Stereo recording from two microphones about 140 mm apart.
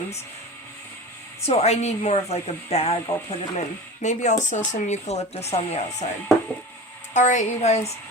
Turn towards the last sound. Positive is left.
turn(degrees=50)  # may be behind; listen again after turning